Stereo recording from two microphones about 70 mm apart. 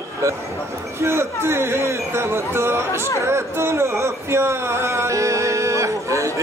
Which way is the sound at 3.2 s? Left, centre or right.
Right.